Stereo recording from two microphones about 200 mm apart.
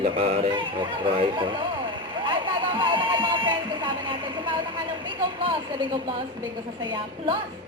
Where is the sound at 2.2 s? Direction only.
25° right (ahead or behind).